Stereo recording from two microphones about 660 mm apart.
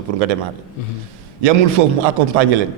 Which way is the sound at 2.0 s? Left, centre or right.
Right.